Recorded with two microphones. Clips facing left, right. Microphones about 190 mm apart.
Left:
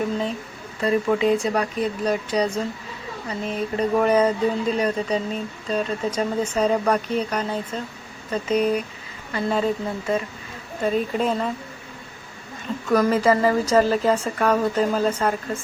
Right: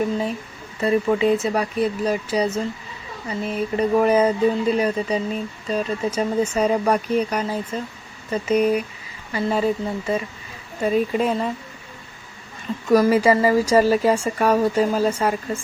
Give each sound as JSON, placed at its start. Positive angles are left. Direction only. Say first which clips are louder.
{"t": 0.8, "sound": "speech", "louder": "right 1 dB", "side_deg": -5}
{"t": 10.8, "sound": "speech", "louder": "right 2 dB", "side_deg": -5}
{"t": 12.9, "sound": "speech", "louder": "right 3 dB", "side_deg": -10}